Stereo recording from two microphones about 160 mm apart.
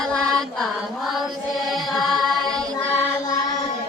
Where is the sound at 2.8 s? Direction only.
15° left (ahead or behind).